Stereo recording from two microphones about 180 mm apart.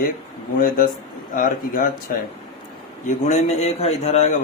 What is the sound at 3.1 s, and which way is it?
A man's voice, 40° left (ahead or behind).